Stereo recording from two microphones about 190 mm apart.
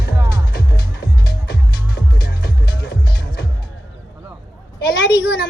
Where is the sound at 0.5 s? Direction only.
55° left (ahead or behind).